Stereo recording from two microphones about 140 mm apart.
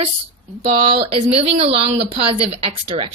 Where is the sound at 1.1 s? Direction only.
45° right (ahead or behind).